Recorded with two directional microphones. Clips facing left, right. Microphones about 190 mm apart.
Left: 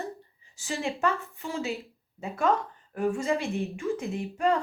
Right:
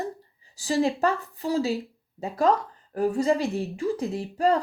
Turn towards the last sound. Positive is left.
turn(degrees=-35)  # may be behind; listen again after turning